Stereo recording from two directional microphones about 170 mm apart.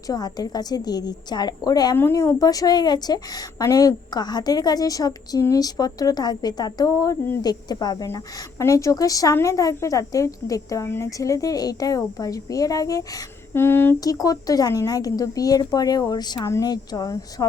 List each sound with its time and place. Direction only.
0.1 s a woman's voice: 25° left (ahead or behind)